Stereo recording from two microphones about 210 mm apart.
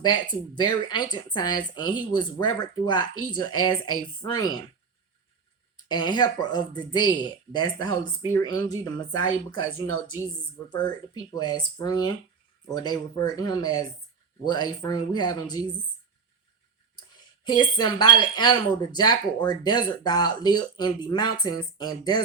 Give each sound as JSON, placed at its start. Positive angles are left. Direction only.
{"t": 0.0, "sound": "speech", "side_deg": 20}
{"t": 5.7, "sound": "speech", "side_deg": 20}
{"t": 10.7, "sound": "speech", "side_deg": 20}
{"t": 17.4, "sound": "speech", "side_deg": 20}